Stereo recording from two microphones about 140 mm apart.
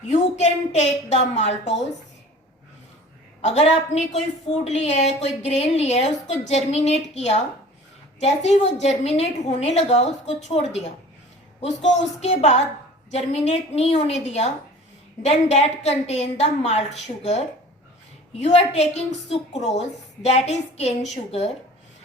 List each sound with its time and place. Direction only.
0.1 s a woman's voice: 55° left (ahead or behind)
3.4 s a woman's voice: 50° left (ahead or behind)
18.3 s a woman's voice: 50° left (ahead or behind)